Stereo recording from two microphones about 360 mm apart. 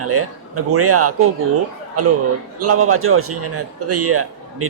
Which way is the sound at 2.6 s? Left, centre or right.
Right.